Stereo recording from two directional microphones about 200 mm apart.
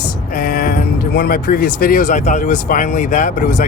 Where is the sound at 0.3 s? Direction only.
45° left (ahead or behind).